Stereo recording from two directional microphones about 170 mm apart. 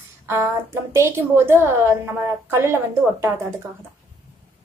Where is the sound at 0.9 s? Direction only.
15° right (ahead or behind).